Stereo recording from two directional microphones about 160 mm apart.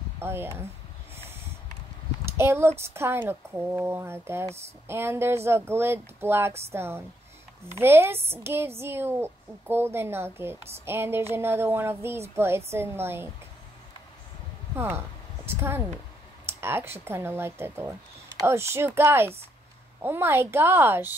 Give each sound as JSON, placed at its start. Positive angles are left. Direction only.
{"t": 0.2, "sound": "speech", "side_deg": -15}
{"t": 2.3, "sound": "speech", "side_deg": -15}
{"t": 14.8, "sound": "speech", "side_deg": -15}